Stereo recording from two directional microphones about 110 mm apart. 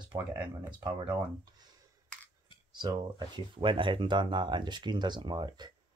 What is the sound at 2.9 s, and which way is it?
Speech, 40° right (ahead or behind).